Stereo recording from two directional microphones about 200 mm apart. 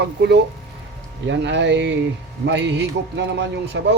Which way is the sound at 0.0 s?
55° right (ahead or behind).